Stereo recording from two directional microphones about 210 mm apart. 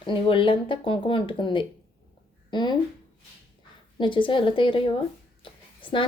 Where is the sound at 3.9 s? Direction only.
25° left (ahead or behind).